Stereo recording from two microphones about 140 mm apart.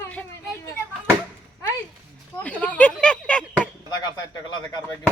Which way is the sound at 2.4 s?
10° left (ahead or behind).